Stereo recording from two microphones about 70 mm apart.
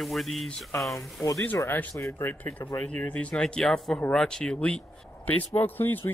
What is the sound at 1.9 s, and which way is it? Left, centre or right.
Speech, left.